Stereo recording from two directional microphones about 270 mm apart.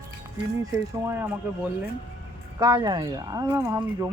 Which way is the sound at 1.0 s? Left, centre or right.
Centre.